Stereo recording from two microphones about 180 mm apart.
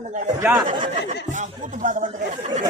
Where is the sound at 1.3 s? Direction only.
45° right (ahead or behind).